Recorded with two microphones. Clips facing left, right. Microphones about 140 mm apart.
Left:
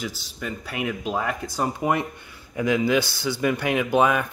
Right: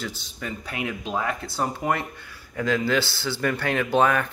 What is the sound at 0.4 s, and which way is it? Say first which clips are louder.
Speech: left 2 dB; 5° left (ahead or behind).